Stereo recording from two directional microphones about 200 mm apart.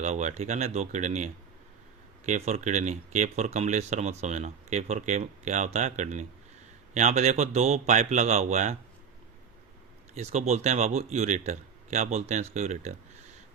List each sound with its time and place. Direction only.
0.0 s speech: 35° right (ahead or behind)
10.2 s speech: 35° right (ahead or behind)